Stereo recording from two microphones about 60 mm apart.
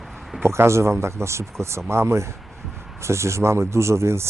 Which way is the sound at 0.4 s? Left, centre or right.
Right.